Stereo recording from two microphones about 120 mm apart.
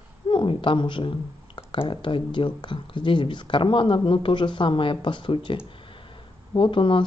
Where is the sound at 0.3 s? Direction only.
45° left (ahead or behind).